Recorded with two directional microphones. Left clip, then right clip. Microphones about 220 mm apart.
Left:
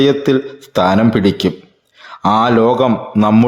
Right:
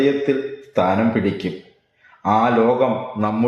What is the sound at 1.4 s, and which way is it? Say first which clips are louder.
A man's voice: left 9 dB; 50° left (ahead or behind).